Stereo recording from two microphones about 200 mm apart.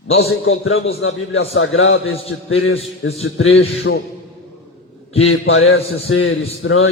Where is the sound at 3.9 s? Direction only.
65° left (ahead or behind).